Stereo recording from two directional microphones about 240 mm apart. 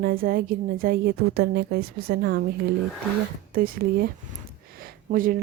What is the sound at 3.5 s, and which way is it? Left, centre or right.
Speech, right.